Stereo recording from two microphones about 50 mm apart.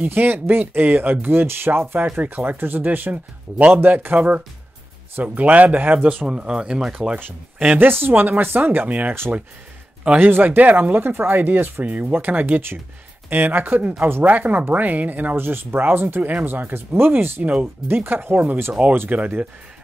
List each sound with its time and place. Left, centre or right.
0.0 s speech: right
3.1 s speech: right
6.2 s speech: centre
7.2 s speech: right
7.8 s speech: right
8.8 s speech: right
10.1 s speech: right
11.8 s speech: right
15.3 s speech: right
16.2 s speech: right
17.4 s speech: right
17.8 s speech: right